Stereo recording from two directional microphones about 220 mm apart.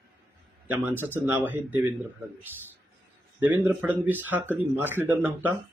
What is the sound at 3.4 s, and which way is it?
Speech, 5° right (ahead or behind).